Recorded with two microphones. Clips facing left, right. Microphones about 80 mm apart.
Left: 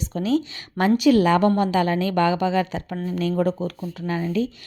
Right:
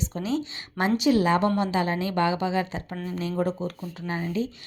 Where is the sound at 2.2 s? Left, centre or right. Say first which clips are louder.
Left 4 dB; left.